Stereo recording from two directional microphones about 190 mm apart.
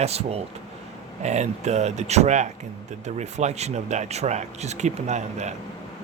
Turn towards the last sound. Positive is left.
turn(degrees=-40)  # may be behind; listen again after turning